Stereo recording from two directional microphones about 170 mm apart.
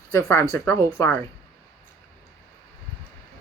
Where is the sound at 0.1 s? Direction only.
15° left (ahead or behind).